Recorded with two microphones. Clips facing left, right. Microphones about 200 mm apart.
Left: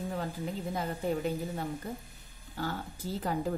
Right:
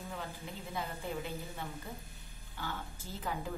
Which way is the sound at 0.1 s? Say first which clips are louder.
Left 8 dB; 40° left (ahead or behind).